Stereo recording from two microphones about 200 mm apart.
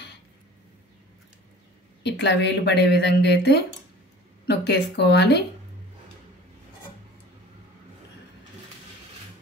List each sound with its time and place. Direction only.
2.0 s a woman's voice: 60° left (ahead or behind)